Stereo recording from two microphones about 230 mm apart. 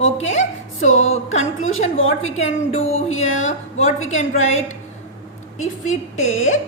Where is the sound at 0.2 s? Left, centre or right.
Left.